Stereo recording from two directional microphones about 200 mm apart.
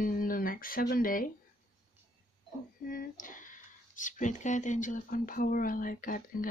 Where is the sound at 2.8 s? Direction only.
45° left (ahead or behind).